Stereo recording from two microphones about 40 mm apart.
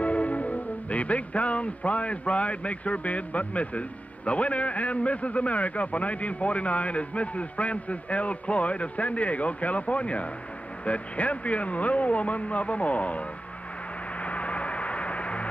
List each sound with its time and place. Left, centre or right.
0.0 s music: left
4.3 s a man's voice: left
14.2 s gong: left